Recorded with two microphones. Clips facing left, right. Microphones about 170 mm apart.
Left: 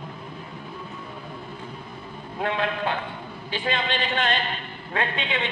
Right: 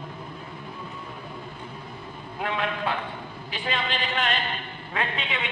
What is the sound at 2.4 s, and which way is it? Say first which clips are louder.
A woman's voice: left 2 dB; 30° left (ahead or behind).